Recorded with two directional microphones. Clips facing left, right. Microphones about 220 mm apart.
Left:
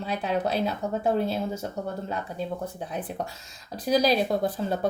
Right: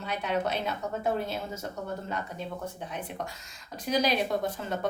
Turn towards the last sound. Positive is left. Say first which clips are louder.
# left 4 dB
turn(degrees=35)  # may be behind; listen again after turning